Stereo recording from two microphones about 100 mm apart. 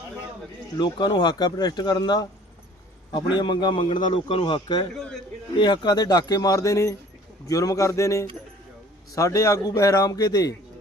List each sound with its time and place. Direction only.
0.8 s a man's voice: 45° left (ahead or behind)